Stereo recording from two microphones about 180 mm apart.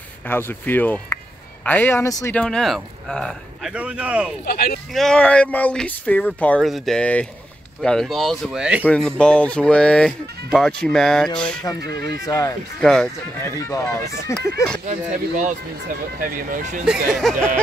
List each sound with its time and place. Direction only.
0.3 s speech: 10° left (ahead or behind)
2.3 s speech: 5° left (ahead or behind)
3.7 s speech: 5° right (ahead or behind)
4.5 s speech: 55° left (ahead or behind)
4.9 s speech: 5° left (ahead or behind)
8.8 s speech: 5° left (ahead or behind)
11.8 s speech: 65° right (ahead or behind)
12.3 s speech: 20° left (ahead or behind)
12.8 s speech: 5° left (ahead or behind)
13.4 s speech: 15° left (ahead or behind)
14.9 s speech: 40° right (ahead or behind)
17.1 s speech: centre (ahead or behind)